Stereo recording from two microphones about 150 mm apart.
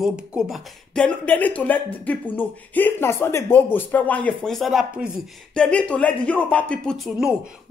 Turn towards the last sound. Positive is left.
turn(degrees=0)  # may be behind; listen again after turning